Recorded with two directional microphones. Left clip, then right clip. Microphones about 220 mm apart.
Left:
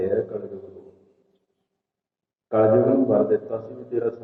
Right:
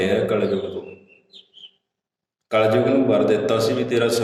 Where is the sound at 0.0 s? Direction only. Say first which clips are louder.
Right 5 dB; 25° right (ahead or behind).